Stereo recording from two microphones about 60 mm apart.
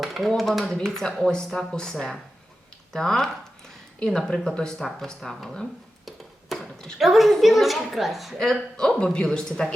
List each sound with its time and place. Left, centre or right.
0.0 s a woman's voice: centre
6.1 s a sound: centre
7.0 s a woman's voice: centre
8.4 s speech: centre